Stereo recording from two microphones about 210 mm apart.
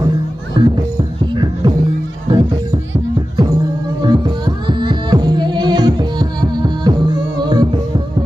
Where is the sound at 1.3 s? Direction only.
20° right (ahead or behind).